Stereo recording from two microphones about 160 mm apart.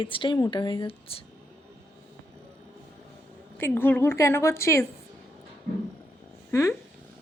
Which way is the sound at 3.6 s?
15° left (ahead or behind).